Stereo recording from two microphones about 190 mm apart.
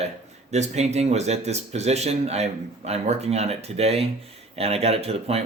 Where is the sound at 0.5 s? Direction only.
35° right (ahead or behind).